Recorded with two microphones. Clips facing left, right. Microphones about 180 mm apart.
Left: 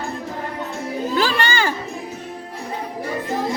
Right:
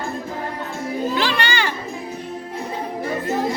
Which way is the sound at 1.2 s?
40° left (ahead or behind).